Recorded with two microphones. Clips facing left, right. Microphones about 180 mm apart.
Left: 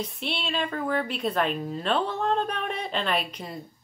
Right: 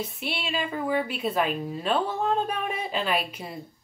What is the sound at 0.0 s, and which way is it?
A woman's voice, 5° right (ahead or behind).